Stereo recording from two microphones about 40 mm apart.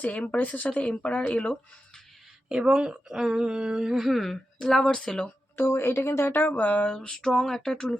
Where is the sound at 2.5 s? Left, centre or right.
Centre.